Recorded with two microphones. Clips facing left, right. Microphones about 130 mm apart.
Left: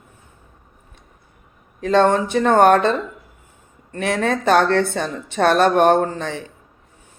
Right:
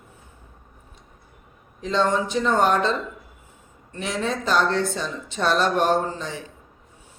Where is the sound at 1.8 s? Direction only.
60° left (ahead or behind).